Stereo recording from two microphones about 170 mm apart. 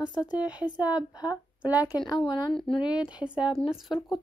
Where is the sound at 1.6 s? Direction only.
10° right (ahead or behind).